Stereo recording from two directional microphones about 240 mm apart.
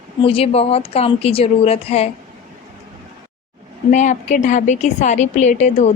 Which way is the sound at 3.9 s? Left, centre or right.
Left.